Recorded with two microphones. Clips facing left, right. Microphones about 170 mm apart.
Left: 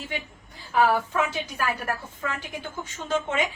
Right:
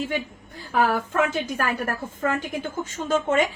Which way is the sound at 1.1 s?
45° right (ahead or behind).